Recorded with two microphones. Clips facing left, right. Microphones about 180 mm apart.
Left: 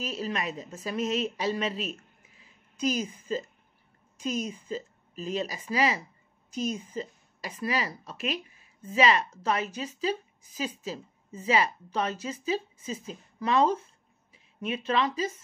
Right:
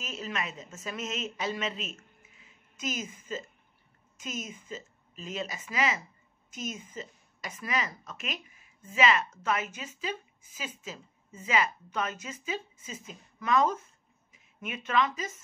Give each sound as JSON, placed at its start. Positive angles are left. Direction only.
{"t": 0.0, "sound": "speech", "side_deg": 35}